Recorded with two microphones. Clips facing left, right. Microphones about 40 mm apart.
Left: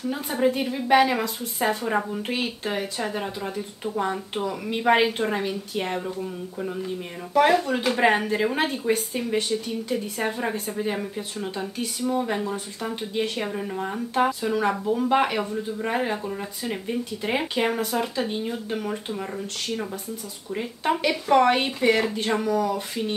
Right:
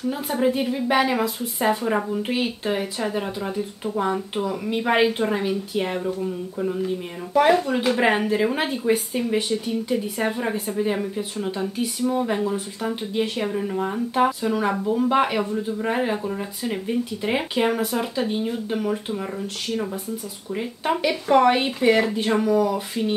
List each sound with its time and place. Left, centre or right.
0.1 s speech: centre